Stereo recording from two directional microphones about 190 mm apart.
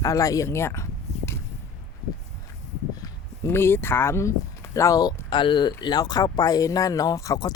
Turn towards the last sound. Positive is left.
turn(degrees=20)  # may be behind; listen again after turning